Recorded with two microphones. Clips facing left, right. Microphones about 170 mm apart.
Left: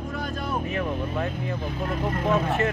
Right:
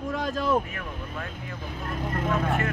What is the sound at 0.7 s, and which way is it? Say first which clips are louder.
Speech: left 9 dB; 25° left (ahead or behind).